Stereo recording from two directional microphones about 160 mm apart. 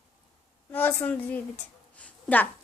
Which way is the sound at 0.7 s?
10° left (ahead or behind).